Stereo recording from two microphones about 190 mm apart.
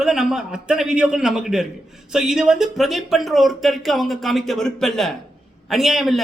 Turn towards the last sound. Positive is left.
turn(degrees=0)  # may be behind; listen again after turning